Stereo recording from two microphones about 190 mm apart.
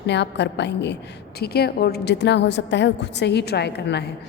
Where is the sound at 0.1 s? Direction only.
65° left (ahead or behind).